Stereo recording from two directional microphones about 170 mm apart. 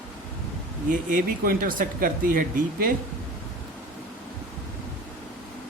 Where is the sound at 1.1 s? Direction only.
55° right (ahead or behind).